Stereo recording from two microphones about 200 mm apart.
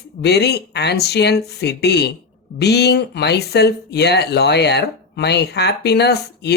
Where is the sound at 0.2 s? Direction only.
55° left (ahead or behind).